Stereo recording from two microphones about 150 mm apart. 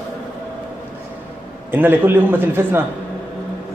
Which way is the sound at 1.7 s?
15° right (ahead or behind).